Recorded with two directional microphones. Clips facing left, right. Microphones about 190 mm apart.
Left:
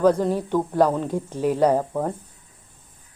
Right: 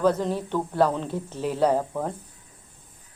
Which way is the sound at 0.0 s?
10° left (ahead or behind).